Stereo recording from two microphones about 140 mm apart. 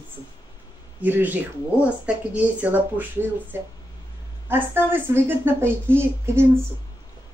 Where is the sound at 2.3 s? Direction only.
10° right (ahead or behind).